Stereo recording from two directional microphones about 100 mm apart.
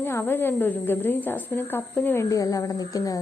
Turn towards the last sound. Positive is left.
turn(degrees=35)  # may be behind; listen again after turning